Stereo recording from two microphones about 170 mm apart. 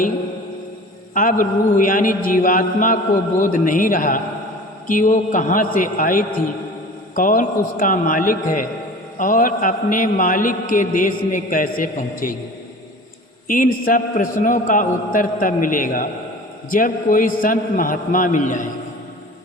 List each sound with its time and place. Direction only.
1.1 s a man's voice: 50° left (ahead or behind)
13.5 s a man's voice: 55° left (ahead or behind)